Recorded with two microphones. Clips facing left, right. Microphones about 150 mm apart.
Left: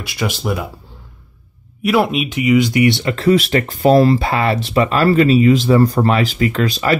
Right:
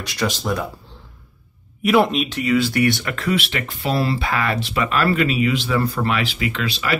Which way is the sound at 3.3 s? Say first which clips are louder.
Left 9 dB; 35° left (ahead or behind).